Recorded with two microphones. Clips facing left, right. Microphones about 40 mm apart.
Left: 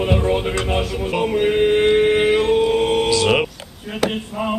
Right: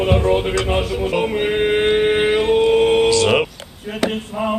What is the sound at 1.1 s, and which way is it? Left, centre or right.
Chant, centre.